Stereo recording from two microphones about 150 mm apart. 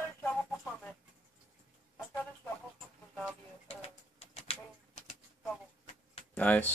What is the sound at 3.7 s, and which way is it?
Bird, 45° left (ahead or behind).